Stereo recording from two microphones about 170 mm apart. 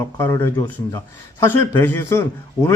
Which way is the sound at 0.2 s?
15° left (ahead or behind).